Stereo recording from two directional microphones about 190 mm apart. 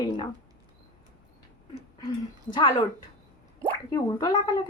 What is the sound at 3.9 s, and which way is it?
Speech, 20° left (ahead or behind).